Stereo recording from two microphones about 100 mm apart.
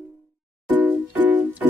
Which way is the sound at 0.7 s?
15° right (ahead or behind).